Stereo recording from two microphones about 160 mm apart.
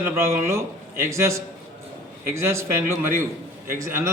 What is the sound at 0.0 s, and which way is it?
A man's voice, 15° right (ahead or behind).